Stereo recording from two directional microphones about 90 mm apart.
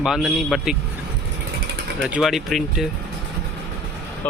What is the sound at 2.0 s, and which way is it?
Speech, 15° right (ahead or behind).